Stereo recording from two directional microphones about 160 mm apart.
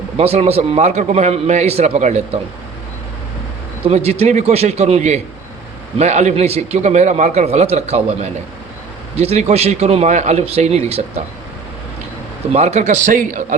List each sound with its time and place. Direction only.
0.2 s a man's voice: 40° right (ahead or behind)
3.8 s a man's voice: 40° right (ahead or behind)
12.5 s a man's voice: 45° right (ahead or behind)